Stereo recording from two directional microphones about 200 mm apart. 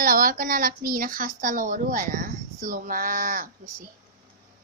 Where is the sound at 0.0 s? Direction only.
45° right (ahead or behind).